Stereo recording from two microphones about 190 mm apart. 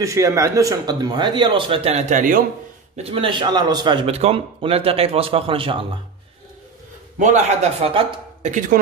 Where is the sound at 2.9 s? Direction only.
30° right (ahead or behind).